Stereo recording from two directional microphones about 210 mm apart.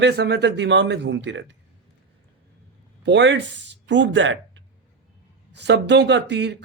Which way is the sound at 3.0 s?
55° right (ahead or behind).